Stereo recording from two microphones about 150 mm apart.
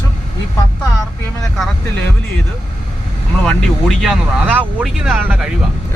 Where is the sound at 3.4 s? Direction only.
Centre (ahead or behind).